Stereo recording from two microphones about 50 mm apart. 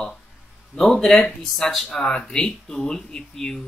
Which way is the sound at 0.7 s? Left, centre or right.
Centre.